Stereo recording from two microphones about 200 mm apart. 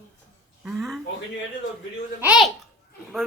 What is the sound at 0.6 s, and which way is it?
Speech, centre (ahead or behind).